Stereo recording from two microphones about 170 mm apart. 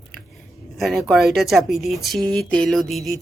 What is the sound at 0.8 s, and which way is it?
Speech, centre (ahead or behind).